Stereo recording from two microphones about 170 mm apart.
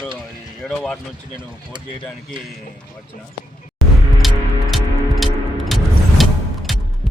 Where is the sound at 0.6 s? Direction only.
Centre (ahead or behind).